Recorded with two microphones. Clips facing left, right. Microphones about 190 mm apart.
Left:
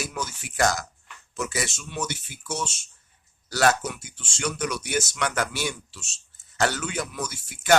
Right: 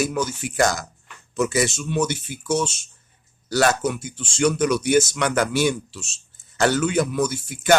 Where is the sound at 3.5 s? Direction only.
20° right (ahead or behind).